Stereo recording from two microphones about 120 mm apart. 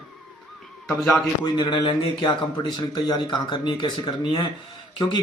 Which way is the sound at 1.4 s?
40° left (ahead or behind).